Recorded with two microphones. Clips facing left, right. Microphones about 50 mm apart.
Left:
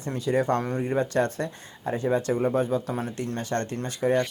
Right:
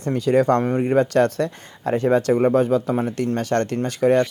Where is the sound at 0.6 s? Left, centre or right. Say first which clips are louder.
Right 7 dB; right.